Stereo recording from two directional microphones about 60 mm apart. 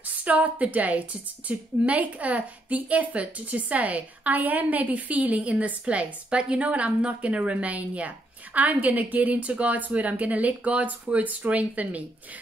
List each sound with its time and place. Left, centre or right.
0.0 s a woman's voice: right